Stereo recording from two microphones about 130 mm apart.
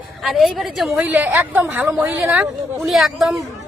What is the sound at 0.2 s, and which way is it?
A woman's voice, centre (ahead or behind).